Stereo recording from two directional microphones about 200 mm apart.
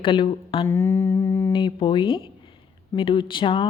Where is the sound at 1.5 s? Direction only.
25° left (ahead or behind).